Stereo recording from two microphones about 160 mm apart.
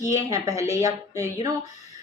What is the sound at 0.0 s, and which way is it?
A woman's voice, 20° right (ahead or behind).